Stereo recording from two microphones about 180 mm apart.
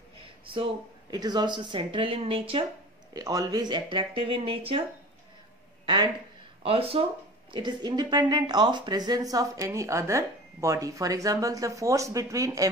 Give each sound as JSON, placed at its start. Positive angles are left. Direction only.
{"t": 1.1, "sound": "speech", "side_deg": -20}
{"t": 5.9, "sound": "speech", "side_deg": -25}